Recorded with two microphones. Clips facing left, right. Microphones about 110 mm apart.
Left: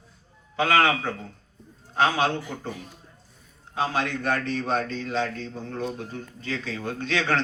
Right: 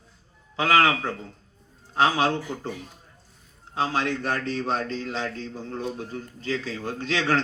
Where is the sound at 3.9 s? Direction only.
35° right (ahead or behind).